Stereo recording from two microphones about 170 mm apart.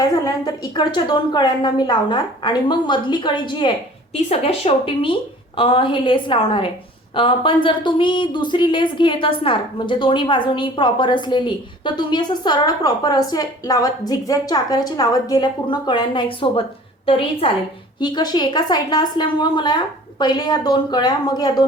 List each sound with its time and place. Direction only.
0.0 s speech: 20° left (ahead or behind)
18.0 s speech: 25° left (ahead or behind)